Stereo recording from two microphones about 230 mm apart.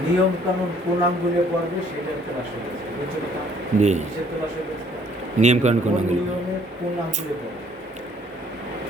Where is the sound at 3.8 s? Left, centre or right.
Right.